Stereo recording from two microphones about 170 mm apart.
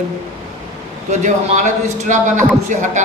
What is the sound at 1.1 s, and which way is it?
A man's voice, 45° right (ahead or behind).